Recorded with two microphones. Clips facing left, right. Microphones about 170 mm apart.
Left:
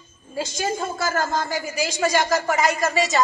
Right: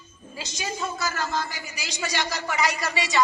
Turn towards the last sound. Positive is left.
turn(degrees=45)  # may be behind; listen again after turning